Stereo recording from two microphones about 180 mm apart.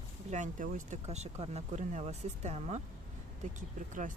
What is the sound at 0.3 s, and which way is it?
Speech, 40° right (ahead or behind).